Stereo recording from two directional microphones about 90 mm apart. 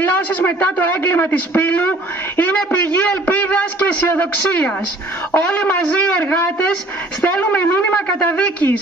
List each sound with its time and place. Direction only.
0.0 s a man's voice: 20° left (ahead or behind)